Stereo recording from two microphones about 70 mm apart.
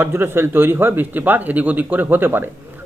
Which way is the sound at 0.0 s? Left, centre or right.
Right.